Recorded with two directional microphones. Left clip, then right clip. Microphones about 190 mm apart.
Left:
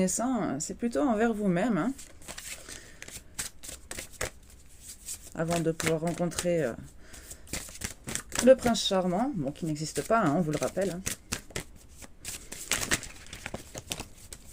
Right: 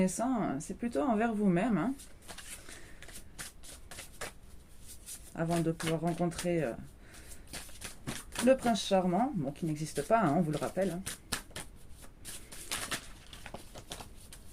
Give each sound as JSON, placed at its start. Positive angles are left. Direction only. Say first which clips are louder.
{"t": 0.0, "sound": "speech", "louder": "left 3 dB", "side_deg": 50}
{"t": 5.3, "sound": "speech", "louder": "left 4 dB", "side_deg": 55}
{"t": 7.8, "sound": "crumpling", "louder": "left 7 dB", "side_deg": 65}
{"t": 8.3, "sound": "speech", "louder": "left 6 dB", "side_deg": 55}
{"t": 13.4, "sound": "crumpling", "louder": "left 7 dB", "side_deg": 60}